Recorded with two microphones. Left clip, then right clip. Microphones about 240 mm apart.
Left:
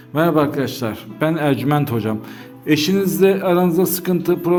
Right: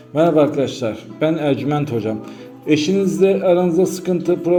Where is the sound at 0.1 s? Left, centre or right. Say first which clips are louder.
Right 2 dB; left.